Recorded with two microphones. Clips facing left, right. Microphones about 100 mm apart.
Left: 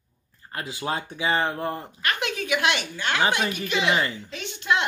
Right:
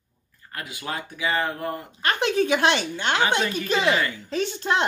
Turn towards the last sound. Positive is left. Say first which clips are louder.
# right 2 dB
turn(degrees=-35)  # may be behind; listen again after turning